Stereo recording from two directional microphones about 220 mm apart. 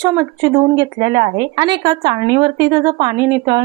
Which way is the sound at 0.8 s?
20° right (ahead or behind).